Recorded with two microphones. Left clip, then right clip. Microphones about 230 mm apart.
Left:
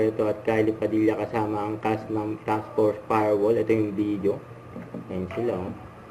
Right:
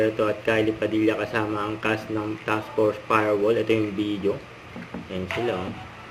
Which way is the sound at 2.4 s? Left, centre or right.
Right.